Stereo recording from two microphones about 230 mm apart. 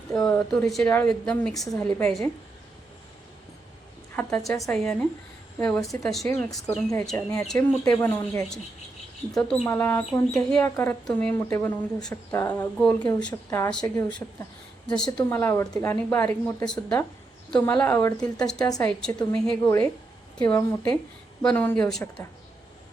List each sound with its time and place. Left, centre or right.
0.2 s a woman's voice: centre
4.1 s a woman's voice: centre
21.4 s a woman's voice: centre